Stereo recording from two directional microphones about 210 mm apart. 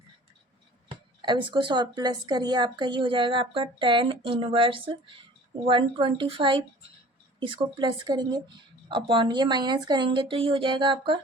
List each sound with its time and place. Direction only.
0.9 s speech: 20° right (ahead or behind)